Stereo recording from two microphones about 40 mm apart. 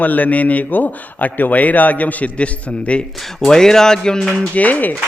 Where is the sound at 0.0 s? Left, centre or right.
Left.